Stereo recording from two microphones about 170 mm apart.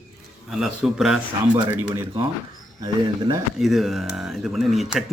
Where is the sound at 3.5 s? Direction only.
Centre (ahead or behind).